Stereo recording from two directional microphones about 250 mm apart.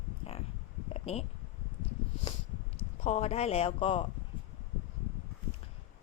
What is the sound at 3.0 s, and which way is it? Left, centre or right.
Speech, left.